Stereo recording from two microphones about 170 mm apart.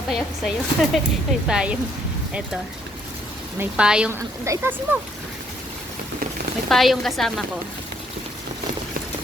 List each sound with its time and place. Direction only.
0.1 s speech: centre (ahead or behind)
3.6 s speech: 5° right (ahead or behind)
6.7 s speech: centre (ahead or behind)